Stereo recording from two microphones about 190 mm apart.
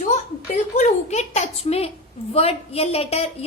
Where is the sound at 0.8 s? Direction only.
40° left (ahead or behind).